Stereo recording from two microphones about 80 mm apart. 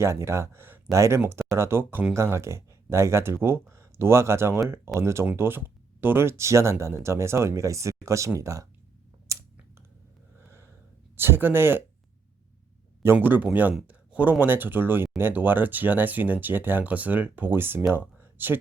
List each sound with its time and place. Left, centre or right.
0.0 s speech: right
5.2 s speech: right
9.3 s a sound: right
11.2 s speech: right
13.2 s speech: right
18.2 s a sound: right